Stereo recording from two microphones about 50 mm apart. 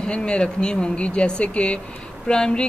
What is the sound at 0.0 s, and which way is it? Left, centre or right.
Speech, centre.